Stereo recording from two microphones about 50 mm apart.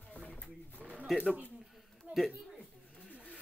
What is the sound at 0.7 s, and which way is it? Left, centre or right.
Pigeon, right.